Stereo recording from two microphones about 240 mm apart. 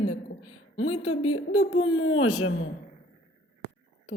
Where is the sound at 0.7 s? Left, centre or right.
Left.